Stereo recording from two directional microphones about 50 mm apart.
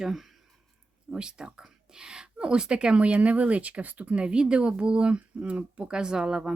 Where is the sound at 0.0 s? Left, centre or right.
Centre.